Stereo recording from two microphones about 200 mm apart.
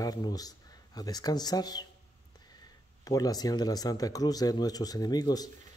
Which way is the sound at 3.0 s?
20° left (ahead or behind).